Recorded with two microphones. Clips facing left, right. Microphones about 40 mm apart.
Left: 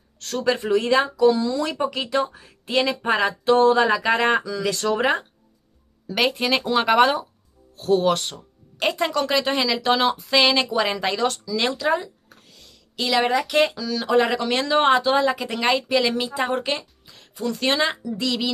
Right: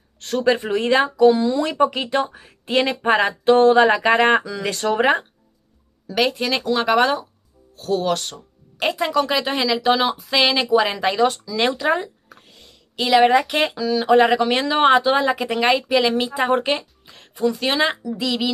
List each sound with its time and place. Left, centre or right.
0.5 s speech: right
2.3 s speech: right
6.0 s speech: centre
8.7 s speech: centre; by 11.9 s right
11.9 s a sound: right
13.5 s speech: centre
17.1 s music: right
17.4 s speech: centre